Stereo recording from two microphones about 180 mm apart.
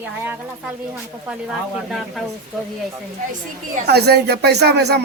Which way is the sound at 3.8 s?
65° right (ahead or behind).